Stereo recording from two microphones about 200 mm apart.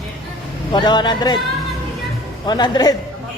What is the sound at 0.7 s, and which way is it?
Speech, 20° left (ahead or behind).